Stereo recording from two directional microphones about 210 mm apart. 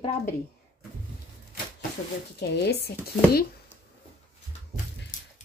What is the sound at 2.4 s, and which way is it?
Speech, 50° left (ahead or behind).